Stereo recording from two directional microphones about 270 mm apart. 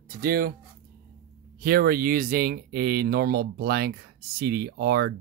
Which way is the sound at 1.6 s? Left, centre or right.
Right.